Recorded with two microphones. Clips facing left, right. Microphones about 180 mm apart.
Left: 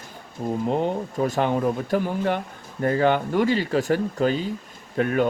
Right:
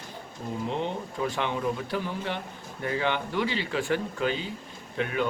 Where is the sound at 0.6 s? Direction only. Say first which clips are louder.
Left 6 dB; 45° left (ahead or behind).